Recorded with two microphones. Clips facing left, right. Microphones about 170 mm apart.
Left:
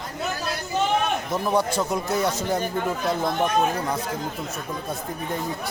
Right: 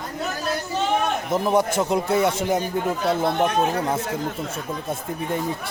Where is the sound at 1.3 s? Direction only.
20° right (ahead or behind).